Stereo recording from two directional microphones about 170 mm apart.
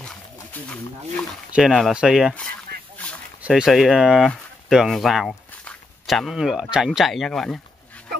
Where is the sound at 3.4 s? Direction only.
5° right (ahead or behind).